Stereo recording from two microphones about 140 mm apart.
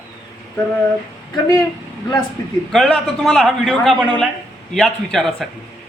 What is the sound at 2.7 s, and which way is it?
A man's voice, centre (ahead or behind).